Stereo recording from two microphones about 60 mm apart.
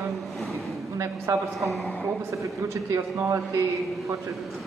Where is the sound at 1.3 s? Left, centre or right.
Right.